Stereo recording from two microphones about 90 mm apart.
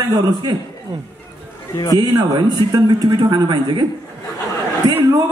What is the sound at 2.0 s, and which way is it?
A man's voice, 55° right (ahead or behind).